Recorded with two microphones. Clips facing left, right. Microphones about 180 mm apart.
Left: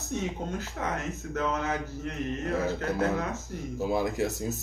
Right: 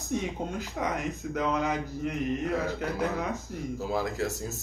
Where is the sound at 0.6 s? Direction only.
15° right (ahead or behind).